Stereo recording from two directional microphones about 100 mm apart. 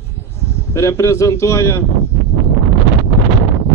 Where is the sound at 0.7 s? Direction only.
30° left (ahead or behind).